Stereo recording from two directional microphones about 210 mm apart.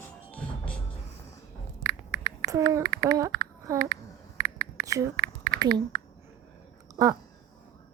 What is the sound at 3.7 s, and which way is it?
Speech, 45° right (ahead or behind).